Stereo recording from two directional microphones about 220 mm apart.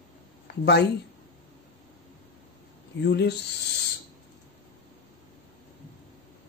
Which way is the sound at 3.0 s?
50° left (ahead or behind).